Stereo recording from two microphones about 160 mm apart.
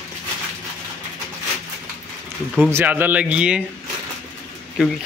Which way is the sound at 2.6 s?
10° right (ahead or behind).